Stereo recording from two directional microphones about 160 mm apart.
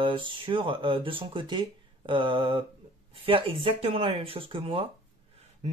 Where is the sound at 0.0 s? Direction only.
30° right (ahead or behind).